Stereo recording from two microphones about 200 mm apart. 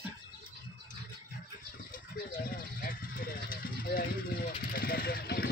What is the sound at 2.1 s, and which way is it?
Vehicle, 45° left (ahead or behind).